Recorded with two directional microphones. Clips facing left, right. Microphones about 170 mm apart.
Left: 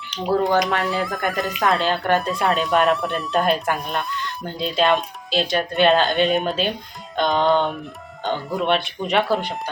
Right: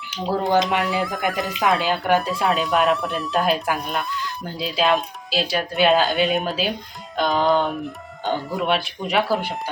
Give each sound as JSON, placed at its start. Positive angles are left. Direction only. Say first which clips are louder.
{"t": 0.1, "sound": "speech", "louder": "left 3 dB", "side_deg": -5}
{"t": 0.5, "sound": "speech", "louder": "right 1 dB", "side_deg": -20}
{"t": 0.8, "sound": "speech", "louder": "even", "side_deg": 0}